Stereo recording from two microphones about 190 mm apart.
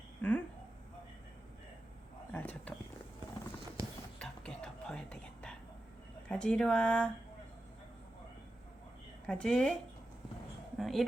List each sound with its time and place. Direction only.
0.2 s a sound: 5° left (ahead or behind)
2.3 s a sound: 10° left (ahead or behind)
4.2 s whispering: 5° left (ahead or behind)
6.2 s speech: 5° left (ahead or behind)
9.2 s speech: 5° left (ahead or behind)
10.8 s speech: centre (ahead or behind)